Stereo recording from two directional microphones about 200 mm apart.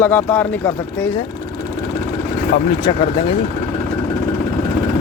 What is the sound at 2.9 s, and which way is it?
Speech, 25° left (ahead or behind).